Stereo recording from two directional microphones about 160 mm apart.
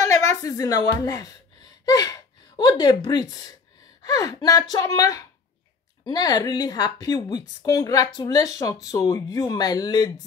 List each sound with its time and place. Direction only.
0.0 s a woman's voice: 20° left (ahead or behind)